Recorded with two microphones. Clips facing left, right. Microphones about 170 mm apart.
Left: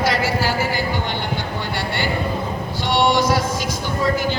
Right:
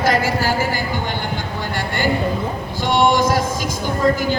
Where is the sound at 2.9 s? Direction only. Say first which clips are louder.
Right 2 dB; 45° right (ahead or behind).